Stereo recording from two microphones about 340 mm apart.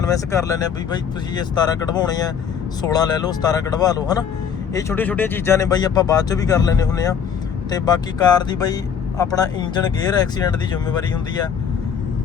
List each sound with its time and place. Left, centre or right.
0.0 s speech: centre